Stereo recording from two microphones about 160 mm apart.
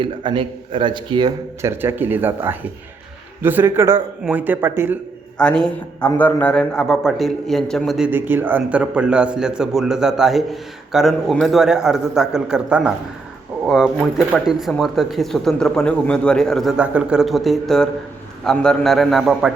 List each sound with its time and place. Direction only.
0.0 s a man's voice: 30° right (ahead or behind)
1.6 s speech: 15° right (ahead or behind)
5.4 s a man's voice: 5° left (ahead or behind)